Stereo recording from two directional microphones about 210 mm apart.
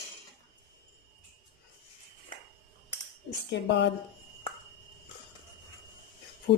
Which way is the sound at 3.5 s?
55° left (ahead or behind).